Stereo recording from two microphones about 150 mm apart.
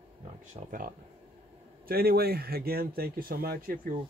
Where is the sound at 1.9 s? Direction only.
90° right.